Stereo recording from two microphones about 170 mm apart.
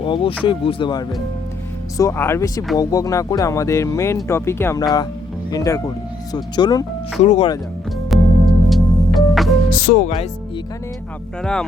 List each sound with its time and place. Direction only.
0.0 s speech: 30° left (ahead or behind)
2.0 s speech: 15° left (ahead or behind)
7.2 s speech: 40° left (ahead or behind)
8.1 s music: centre (ahead or behind)
9.7 s music: 55° left (ahead or behind)